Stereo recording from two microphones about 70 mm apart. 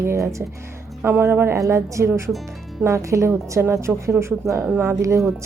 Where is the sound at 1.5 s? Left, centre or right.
Right.